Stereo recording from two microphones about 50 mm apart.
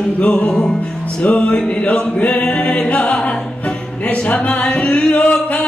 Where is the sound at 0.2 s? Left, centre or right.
Left.